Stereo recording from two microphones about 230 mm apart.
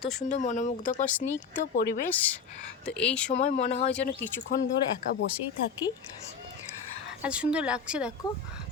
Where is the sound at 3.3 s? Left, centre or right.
Left.